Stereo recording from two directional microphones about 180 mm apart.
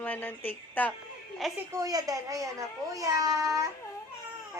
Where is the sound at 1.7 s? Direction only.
20° right (ahead or behind).